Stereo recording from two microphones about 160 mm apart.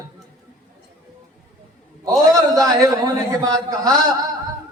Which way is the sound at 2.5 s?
20° right (ahead or behind).